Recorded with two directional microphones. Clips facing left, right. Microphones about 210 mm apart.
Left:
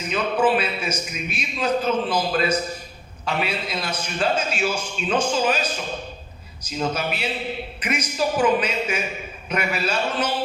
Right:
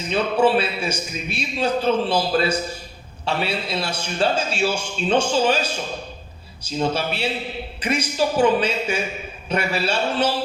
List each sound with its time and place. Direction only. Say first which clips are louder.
0.1 s a man's voice: right 2 dB; 30° right (ahead or behind)